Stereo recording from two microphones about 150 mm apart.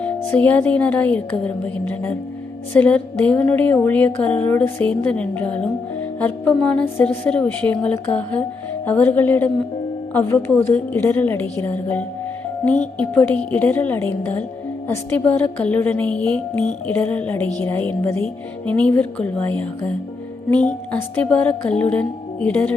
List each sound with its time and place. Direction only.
0.3 s a woman's voice: 10° left (ahead or behind)
20.9 s a woman's voice: 10° left (ahead or behind)